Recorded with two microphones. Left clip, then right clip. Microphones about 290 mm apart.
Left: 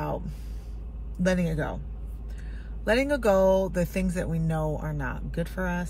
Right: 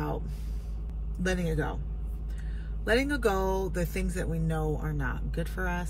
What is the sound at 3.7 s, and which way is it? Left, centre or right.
Speech, centre.